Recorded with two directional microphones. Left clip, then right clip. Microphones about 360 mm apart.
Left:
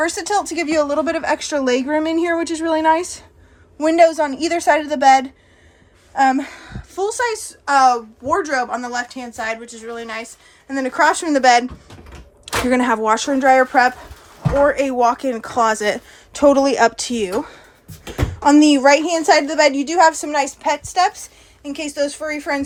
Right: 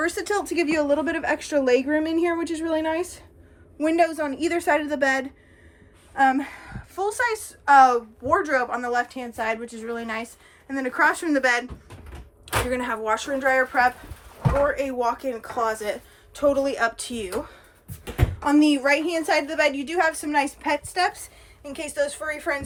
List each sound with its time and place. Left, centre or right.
0.0 s a woman's voice: centre
12.7 s a woman's voice: centre